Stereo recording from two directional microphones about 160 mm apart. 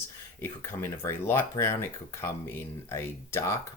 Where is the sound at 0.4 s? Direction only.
15° left (ahead or behind).